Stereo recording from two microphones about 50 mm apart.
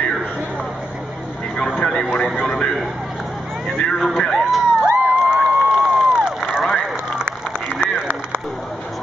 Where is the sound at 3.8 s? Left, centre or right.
Left.